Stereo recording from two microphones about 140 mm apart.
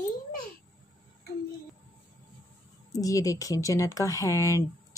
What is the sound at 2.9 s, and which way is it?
Speech, 25° left (ahead or behind).